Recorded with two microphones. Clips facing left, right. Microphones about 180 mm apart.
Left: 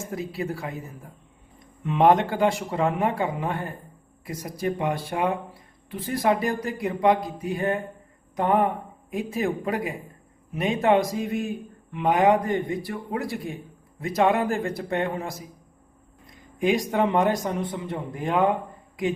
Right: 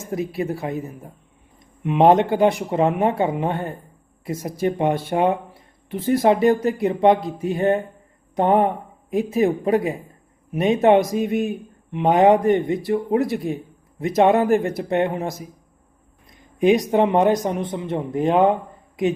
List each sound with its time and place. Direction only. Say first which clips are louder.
0.1 s speech: right 7 dB; 20° right (ahead or behind)
16.6 s speech: right 6 dB; 20° right (ahead or behind)